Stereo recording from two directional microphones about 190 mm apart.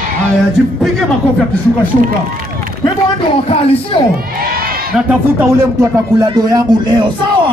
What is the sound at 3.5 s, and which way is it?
Speech, 30° left (ahead or behind).